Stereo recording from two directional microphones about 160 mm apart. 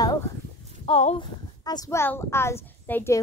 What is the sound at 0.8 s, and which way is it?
Speech, 40° left (ahead or behind).